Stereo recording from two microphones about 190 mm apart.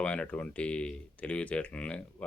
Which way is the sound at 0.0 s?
5° left (ahead or behind).